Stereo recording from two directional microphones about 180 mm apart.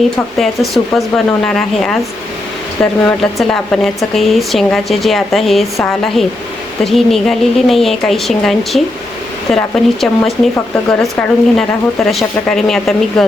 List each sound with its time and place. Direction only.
0.3 s speech: centre (ahead or behind)